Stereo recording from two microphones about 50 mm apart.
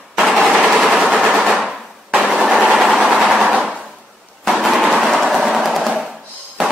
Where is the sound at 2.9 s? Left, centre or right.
Right.